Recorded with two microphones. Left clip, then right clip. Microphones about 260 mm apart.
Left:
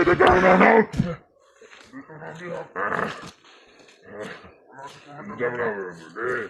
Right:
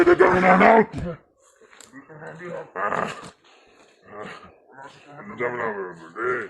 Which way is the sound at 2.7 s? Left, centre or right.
Right.